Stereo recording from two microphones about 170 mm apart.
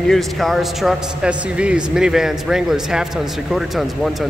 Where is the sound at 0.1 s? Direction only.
Centre (ahead or behind).